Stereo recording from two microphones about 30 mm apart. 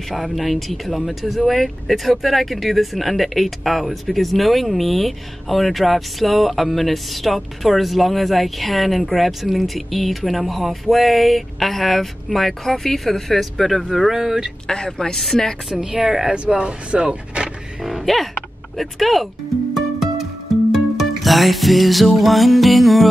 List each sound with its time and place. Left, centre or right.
0.1 s speech: centre
14.1 s speech: centre
14.9 s a woman's voice: centre
15.7 s a woman's voice: right
16.4 s speech: right
17.8 s a sound: centre
18.8 s speech: centre
19.7 s music: centre